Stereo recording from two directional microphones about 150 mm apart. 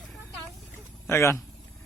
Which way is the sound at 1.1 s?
15° left (ahead or behind).